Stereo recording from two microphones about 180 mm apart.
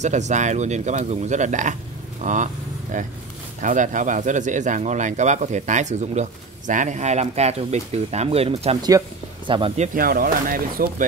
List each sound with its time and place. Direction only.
0.0 s speech: 40° right (ahead or behind)
9.9 s speech: 50° right (ahead or behind)